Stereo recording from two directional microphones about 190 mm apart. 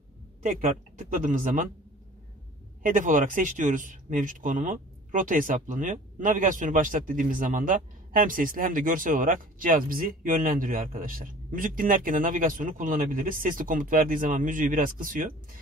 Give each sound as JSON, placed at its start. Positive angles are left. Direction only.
{"t": 0.4, "sound": "speech", "side_deg": -45}
{"t": 2.8, "sound": "speech", "side_deg": -45}